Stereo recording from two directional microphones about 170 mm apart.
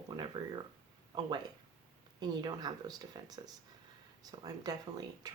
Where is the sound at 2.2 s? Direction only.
25° right (ahead or behind).